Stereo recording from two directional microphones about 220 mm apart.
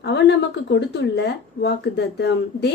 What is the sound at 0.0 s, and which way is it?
A woman's voice, 50° left (ahead or behind).